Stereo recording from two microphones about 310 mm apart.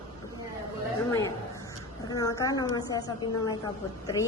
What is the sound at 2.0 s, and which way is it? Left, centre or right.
Speech, centre.